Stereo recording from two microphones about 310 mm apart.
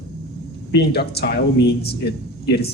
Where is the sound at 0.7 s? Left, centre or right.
Left.